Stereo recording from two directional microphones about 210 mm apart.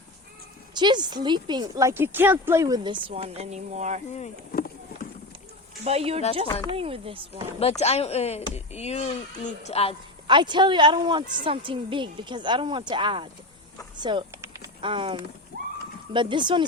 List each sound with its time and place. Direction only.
0.7 s speech: 20° right (ahead or behind)
4.1 s speech: 35° left (ahead or behind)
5.8 s speech: 30° right (ahead or behind)
7.6 s speech: 30° left (ahead or behind)
10.2 s speech: 20° right (ahead or behind)
13.9 s a sound: 20° right (ahead or behind)
16.1 s speech: 25° right (ahead or behind)